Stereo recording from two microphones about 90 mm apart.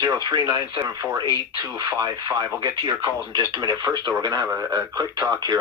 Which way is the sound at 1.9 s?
45° right (ahead or behind).